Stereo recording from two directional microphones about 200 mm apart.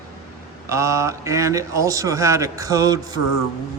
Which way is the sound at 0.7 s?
15° right (ahead or behind).